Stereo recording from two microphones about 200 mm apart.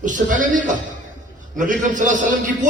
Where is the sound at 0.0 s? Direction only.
40° right (ahead or behind).